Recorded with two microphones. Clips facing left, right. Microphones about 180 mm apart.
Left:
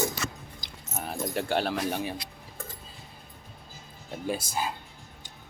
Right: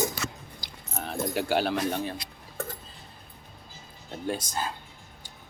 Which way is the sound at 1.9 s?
10° left (ahead or behind).